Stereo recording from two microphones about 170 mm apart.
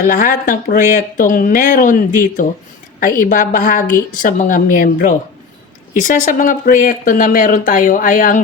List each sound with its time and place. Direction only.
0.0 s speech: 50° left (ahead or behind)